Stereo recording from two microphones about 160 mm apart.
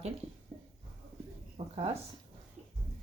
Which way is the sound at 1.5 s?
40° right (ahead or behind).